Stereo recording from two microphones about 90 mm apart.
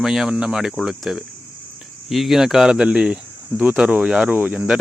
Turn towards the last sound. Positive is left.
turn(degrees=-20)  # may be behind; listen again after turning